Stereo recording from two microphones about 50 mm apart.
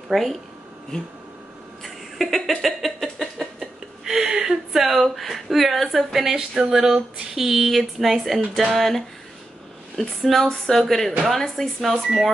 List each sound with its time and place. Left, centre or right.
0.1 s speech: centre
1.8 s a sound: centre
6.6 s speech: centre